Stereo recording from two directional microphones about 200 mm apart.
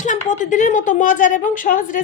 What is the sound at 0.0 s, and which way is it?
A woman's voice, 40° left (ahead or behind).